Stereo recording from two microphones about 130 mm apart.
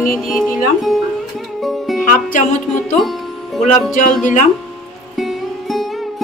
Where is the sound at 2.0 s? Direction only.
75° left (ahead or behind).